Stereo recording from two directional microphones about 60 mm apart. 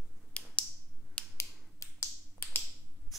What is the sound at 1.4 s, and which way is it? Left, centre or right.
Finger snapping, left.